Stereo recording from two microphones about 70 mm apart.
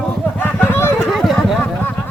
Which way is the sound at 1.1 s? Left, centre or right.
Centre.